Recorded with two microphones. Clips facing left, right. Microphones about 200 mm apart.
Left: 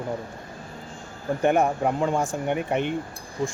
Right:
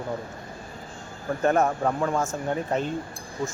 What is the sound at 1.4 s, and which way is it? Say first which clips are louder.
Speech: left 1 dB; 15° left (ahead or behind).